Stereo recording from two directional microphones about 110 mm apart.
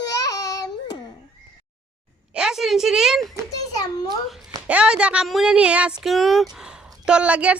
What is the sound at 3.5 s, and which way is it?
Children playing, 35° left (ahead or behind).